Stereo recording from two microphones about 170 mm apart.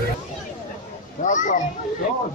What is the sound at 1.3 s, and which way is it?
Children playing, 50° left (ahead or behind).